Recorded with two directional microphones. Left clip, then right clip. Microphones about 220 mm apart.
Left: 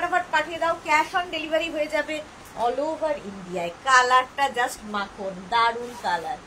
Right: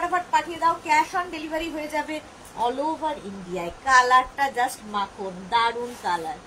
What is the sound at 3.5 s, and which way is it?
A woman's voice, 15° left (ahead or behind).